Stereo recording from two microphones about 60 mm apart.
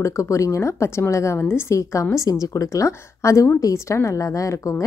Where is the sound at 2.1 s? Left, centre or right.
Left.